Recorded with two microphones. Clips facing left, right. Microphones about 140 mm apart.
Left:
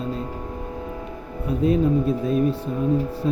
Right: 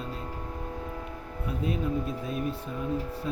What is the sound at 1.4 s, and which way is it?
Speech, 35° left (ahead or behind).